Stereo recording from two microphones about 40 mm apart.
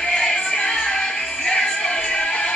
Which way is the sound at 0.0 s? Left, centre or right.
Left.